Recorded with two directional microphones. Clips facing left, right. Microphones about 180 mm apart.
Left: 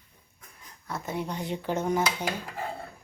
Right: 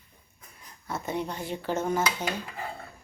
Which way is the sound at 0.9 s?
Centre (ahead or behind).